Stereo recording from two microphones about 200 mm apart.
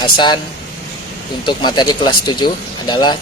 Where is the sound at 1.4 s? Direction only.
20° left (ahead or behind).